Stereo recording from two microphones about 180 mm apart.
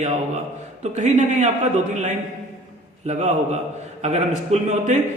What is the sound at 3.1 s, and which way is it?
A man's voice, 40° right (ahead or behind).